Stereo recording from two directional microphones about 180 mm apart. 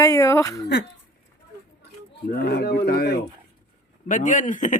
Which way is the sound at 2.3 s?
60° left (ahead or behind).